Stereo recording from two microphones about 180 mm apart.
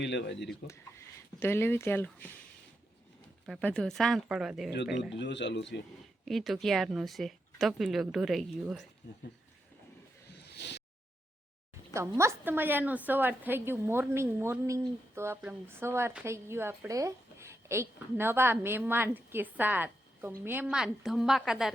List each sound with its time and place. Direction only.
0.0 s speech: 80° left
0.7 s speech: 15° left (ahead or behind)
3.4 s speech: 5° left (ahead or behind)
5.1 s speech: 75° left (ahead or behind)
6.2 s speech: centre (ahead or behind)
9.0 s speech: 85° left
10.3 s a sound: 65° left (ahead or behind)
11.9 s a woman's voice: 15° right (ahead or behind)